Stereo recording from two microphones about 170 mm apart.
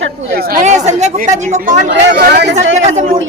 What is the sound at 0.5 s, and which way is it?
Speech, 45° right (ahead or behind).